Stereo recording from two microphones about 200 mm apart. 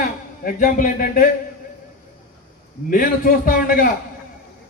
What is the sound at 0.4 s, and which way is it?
Speech, 40° left (ahead or behind).